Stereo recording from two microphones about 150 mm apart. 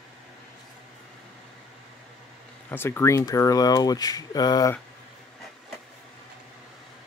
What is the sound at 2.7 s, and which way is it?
Speech, 15° left (ahead or behind).